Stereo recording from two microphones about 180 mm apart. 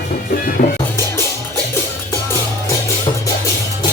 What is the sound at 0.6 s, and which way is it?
Music, 60° left (ahead or behind).